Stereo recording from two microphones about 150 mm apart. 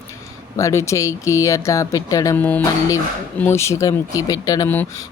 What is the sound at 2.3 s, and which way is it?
Speech, 10° left (ahead or behind).